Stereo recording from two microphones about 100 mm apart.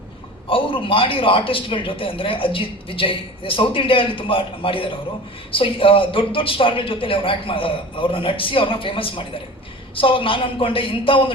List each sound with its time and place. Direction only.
0.4 s a man's voice: 60° left (ahead or behind)